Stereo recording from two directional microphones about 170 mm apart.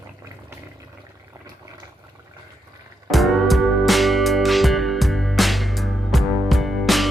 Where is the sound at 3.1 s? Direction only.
Centre (ahead or behind).